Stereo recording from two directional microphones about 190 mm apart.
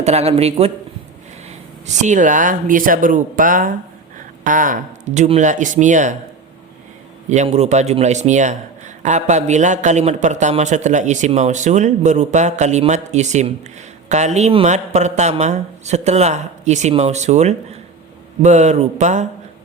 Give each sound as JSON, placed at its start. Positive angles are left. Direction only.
{"t": 0.0, "sound": "a man's voice", "side_deg": -35}
{"t": 2.0, "sound": "a man's voice", "side_deg": -40}
{"t": 7.3, "sound": "a man's voice", "side_deg": -35}